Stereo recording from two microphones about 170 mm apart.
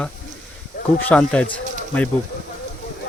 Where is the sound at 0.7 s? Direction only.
70° left (ahead or behind).